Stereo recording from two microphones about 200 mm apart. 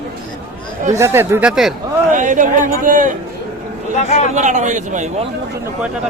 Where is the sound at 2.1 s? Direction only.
40° right (ahead or behind).